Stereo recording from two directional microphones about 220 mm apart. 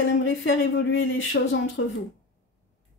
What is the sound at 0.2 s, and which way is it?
Speech, 55° left (ahead or behind).